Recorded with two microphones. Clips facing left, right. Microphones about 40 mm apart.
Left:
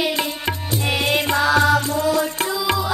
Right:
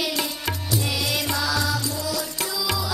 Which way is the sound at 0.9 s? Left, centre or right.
Left.